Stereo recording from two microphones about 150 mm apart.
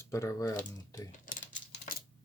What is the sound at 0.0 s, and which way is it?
Speech, 20° left (ahead or behind).